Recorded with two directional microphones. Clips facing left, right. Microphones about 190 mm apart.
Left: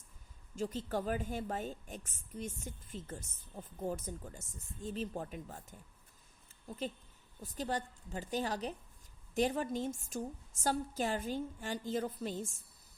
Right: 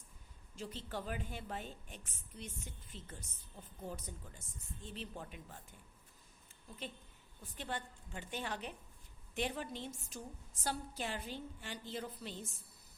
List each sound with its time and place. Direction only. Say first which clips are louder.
0.5 s a woman's voice: left 8 dB; 45° left (ahead or behind)
6.7 s a woman's voice: left 8 dB; 40° left (ahead or behind)